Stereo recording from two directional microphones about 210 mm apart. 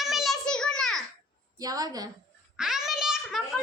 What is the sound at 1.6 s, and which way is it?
Speech, 20° right (ahead or behind).